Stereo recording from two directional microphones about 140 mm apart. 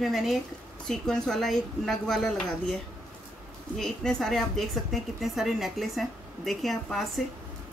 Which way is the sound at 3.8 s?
5° left (ahead or behind).